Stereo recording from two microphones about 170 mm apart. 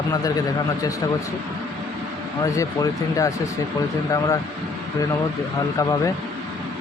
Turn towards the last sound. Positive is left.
turn(degrees=20)  # may be behind; listen again after turning